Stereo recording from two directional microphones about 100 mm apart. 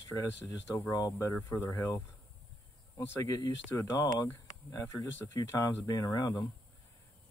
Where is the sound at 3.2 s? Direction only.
35° left (ahead or behind).